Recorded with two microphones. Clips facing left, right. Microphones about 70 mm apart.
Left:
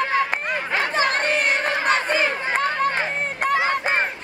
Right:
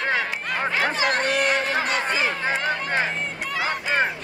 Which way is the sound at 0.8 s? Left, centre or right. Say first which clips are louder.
Left 2 dB; left.